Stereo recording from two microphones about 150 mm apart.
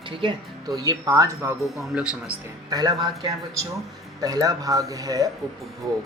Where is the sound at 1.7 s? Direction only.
5° right (ahead or behind).